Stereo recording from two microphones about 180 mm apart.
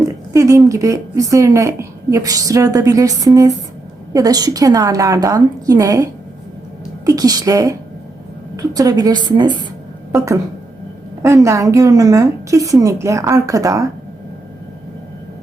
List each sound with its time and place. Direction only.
0.3 s a woman's voice: 20° right (ahead or behind)